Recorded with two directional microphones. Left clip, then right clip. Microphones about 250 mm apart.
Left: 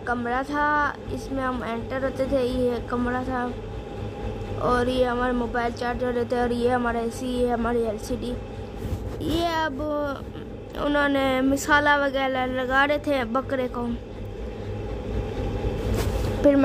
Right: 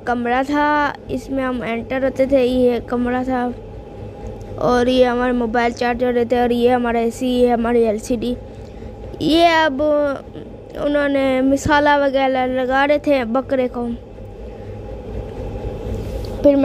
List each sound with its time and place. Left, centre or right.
0.0 s speech: right
4.6 s speech: right